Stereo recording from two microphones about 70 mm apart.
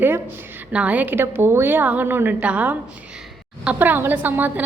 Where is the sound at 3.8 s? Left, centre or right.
Right.